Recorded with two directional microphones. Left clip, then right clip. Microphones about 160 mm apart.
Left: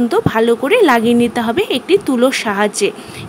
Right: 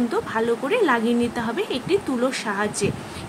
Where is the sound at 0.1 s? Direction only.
50° left (ahead or behind).